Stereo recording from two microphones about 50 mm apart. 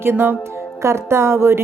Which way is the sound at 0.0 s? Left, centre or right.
Right.